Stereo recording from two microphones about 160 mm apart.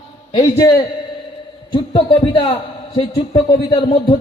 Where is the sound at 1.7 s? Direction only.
30° left (ahead or behind).